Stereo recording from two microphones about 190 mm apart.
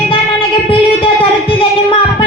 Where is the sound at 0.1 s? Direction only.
30° left (ahead or behind).